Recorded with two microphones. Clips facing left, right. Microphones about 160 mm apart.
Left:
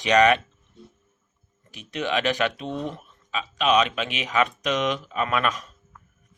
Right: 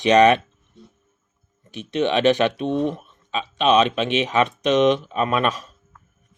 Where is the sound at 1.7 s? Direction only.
25° right (ahead or behind).